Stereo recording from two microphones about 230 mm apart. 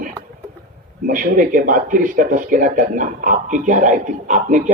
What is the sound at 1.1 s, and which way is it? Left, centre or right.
Speech, right.